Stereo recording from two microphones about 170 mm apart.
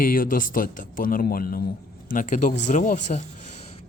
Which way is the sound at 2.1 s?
50° left (ahead or behind).